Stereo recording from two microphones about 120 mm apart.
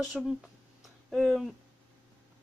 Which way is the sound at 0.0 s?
5° right (ahead or behind).